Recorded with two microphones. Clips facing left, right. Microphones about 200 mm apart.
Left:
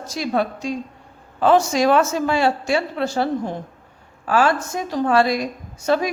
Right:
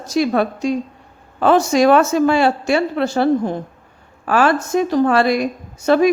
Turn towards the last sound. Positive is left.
turn(degrees=-60)  # may be behind; listen again after turning